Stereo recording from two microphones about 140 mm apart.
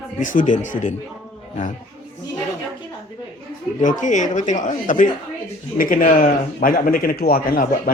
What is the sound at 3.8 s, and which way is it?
Speech, 65° left (ahead or behind).